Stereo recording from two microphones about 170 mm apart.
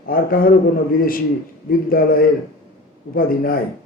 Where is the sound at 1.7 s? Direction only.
60° left (ahead or behind).